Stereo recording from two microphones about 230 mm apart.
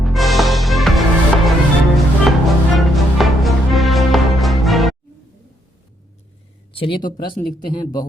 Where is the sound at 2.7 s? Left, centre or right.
Centre.